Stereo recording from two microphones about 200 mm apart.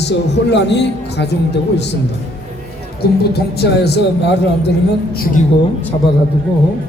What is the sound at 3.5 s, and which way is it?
Speech, 55° left (ahead or behind).